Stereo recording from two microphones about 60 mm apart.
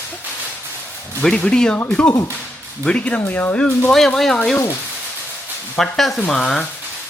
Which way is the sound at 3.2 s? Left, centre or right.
Left.